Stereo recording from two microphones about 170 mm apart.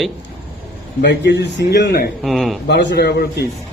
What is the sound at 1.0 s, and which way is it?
A man's voice, 90° left.